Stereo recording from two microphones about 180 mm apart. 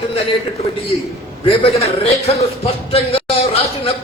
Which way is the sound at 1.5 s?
30° left (ahead or behind).